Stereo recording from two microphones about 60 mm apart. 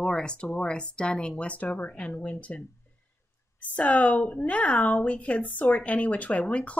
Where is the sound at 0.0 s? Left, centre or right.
Centre.